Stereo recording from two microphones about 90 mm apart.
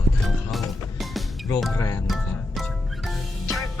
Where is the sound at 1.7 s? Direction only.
35° left (ahead or behind).